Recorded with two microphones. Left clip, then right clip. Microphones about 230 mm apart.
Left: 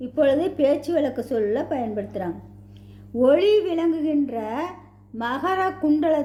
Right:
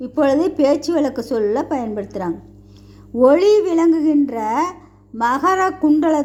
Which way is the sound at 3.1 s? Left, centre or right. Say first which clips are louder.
Right 5 dB; right.